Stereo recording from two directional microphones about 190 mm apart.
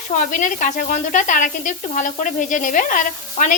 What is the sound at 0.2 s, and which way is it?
A woman's voice, 45° left (ahead or behind).